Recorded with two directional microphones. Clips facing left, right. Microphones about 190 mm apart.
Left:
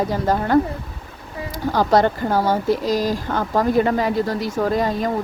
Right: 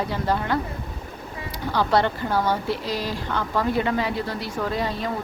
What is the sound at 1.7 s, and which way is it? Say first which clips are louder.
Speech: left 4 dB; 40° left (ahead or behind).